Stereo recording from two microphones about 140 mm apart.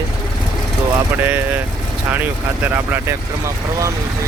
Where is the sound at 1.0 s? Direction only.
15° right (ahead or behind).